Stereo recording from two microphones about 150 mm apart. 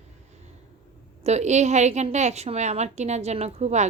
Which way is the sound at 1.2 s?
50° right (ahead or behind).